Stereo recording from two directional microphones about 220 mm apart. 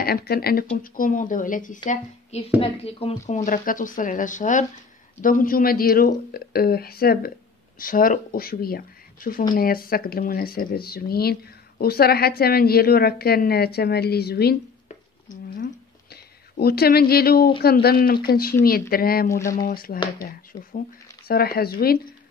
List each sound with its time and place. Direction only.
0.0 s a woman's voice: 45° left (ahead or behind)
2.6 s a woman's voice: 25° left (ahead or behind); by 14.6 s 45° left (ahead or behind)
14.9 s a sound: 35° left (ahead or behind)
17.8 s a woman's voice: 45° left (ahead or behind)
21.3 s speech: 45° left (ahead or behind)